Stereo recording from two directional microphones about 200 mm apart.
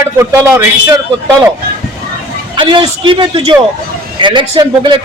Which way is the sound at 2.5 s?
25° right (ahead or behind).